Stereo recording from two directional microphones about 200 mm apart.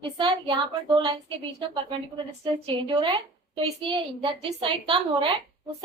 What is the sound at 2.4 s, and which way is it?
A woman's voice, 25° right (ahead or behind).